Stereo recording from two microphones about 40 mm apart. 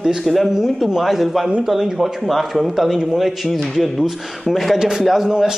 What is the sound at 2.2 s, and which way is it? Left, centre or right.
A man's voice, centre.